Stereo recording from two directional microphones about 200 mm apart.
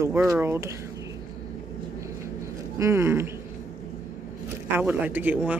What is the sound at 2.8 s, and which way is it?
Speech, 10° right (ahead or behind).